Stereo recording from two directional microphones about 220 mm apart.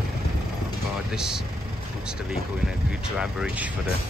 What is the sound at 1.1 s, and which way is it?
Speech, 5° right (ahead or behind).